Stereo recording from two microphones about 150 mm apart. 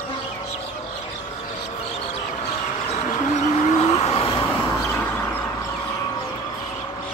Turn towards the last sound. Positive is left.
turn(degrees=15)  # may be behind; listen again after turning